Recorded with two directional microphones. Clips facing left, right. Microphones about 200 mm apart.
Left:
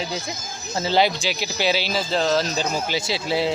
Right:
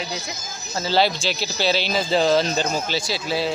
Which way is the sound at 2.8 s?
10° left (ahead or behind).